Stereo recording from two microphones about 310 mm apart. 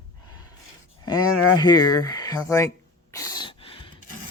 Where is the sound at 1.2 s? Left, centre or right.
Left.